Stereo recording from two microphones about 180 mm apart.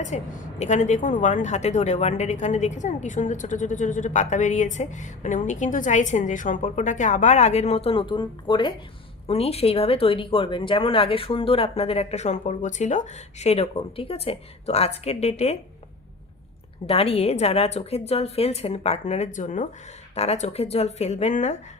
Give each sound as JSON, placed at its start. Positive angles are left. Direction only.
{"t": 0.1, "sound": "a woman's voice", "side_deg": 40}
{"t": 16.8, "sound": "speech", "side_deg": 35}